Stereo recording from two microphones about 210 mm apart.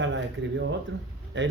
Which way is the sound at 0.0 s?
60° right (ahead or behind).